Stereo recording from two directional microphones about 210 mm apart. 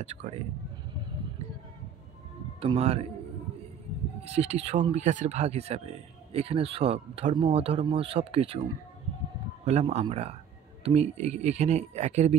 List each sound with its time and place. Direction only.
0.0 s speech: 30° right (ahead or behind)
2.6 s speech: 30° right (ahead or behind)
4.2 s speech: 30° right (ahead or behind)
9.7 s speech: 30° right (ahead or behind)